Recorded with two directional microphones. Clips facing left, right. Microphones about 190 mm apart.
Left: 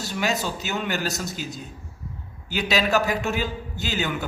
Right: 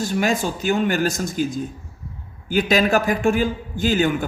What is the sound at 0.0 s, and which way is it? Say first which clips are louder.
A man's voice: right 5 dB; 50° right (ahead or behind).